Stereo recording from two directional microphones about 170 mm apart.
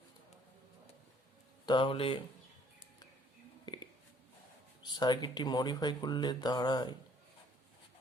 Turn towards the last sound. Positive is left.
turn(degrees=25)  # may be behind; listen again after turning